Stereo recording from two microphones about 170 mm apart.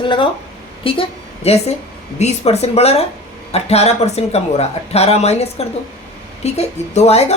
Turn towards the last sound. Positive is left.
turn(degrees=40)  # may be behind; listen again after turning